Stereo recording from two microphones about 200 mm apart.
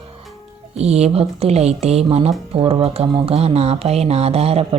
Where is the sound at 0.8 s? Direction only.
30° right (ahead or behind).